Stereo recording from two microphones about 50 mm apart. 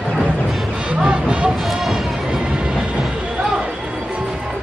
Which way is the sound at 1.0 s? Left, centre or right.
Right.